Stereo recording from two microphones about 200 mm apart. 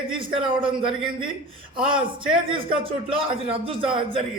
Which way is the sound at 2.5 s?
25° right (ahead or behind).